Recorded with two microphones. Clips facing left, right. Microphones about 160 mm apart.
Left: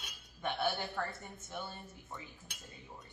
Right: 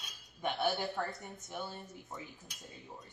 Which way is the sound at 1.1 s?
20° right (ahead or behind).